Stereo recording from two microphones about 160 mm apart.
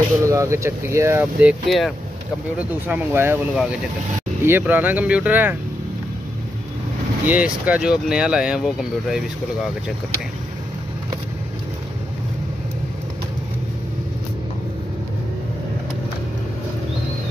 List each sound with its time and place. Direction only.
0.2 s speech: 20° right (ahead or behind); by 2.0 s centre (ahead or behind)
2.9 s speech: 15° right (ahead or behind)
7.2 s speech: 10° right (ahead or behind)